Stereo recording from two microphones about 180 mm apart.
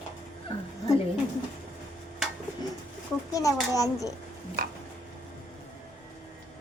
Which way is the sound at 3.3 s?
20° left (ahead or behind).